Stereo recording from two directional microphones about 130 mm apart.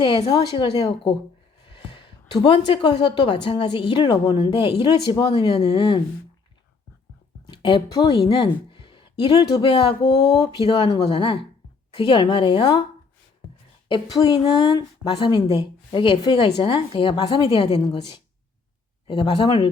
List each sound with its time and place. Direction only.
0.0 s a woman's voice: 45° left (ahead or behind)
7.4 s speech: 40° left (ahead or behind)
13.8 s speech: 35° left (ahead or behind)
17.5 s speech: 45° left (ahead or behind)